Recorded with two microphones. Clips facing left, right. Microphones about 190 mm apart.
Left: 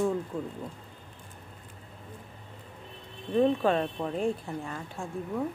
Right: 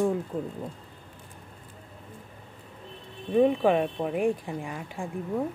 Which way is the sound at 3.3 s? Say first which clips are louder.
Right 3 dB; 15° right (ahead or behind).